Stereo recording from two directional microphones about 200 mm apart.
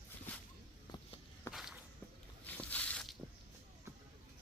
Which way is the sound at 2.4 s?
10° left (ahead or behind).